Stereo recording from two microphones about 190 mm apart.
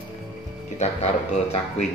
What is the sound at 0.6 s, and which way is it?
Speech, 35° left (ahead or behind).